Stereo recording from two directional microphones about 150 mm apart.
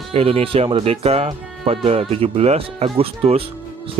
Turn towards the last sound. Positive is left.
turn(degrees=-40)  # may be behind; listen again after turning